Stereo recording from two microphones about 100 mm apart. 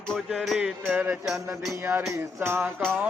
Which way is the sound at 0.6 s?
15° right (ahead or behind).